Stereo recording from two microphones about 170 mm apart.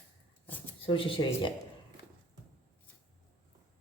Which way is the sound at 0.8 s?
30° left (ahead or behind).